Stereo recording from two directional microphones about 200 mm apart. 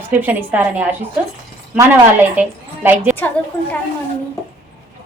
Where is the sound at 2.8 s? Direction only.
10° right (ahead or behind).